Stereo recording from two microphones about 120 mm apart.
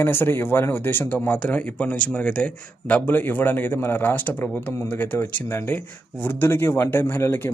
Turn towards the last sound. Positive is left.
turn(degrees=20)  # may be behind; listen again after turning